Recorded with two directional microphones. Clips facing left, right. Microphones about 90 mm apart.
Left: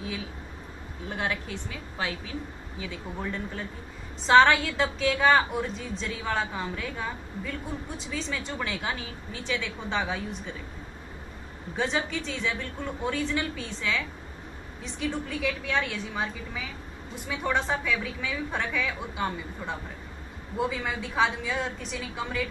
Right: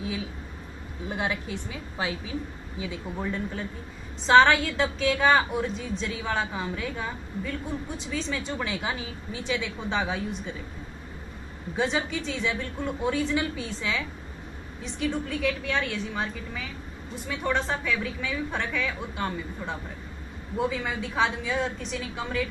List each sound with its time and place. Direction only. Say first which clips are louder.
1.0 s a woman's voice: right 1 dB; 15° right (ahead or behind)
11.7 s a woman's voice: right 1 dB; 5° right (ahead or behind)